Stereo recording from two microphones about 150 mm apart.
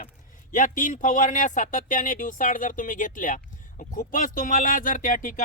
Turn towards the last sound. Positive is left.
turn(degrees=65)  # may be behind; listen again after turning